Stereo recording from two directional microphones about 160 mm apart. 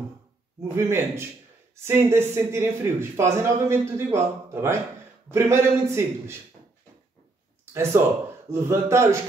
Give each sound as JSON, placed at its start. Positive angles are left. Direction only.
{"t": 0.7, "sound": "speech", "side_deg": -15}
{"t": 7.7, "sound": "speech", "side_deg": -15}